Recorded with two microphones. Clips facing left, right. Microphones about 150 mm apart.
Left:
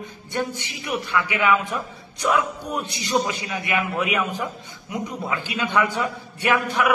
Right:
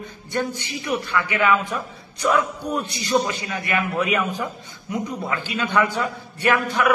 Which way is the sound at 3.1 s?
15° left (ahead or behind).